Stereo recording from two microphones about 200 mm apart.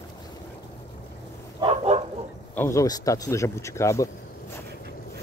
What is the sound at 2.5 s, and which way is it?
Speech, 15° left (ahead or behind).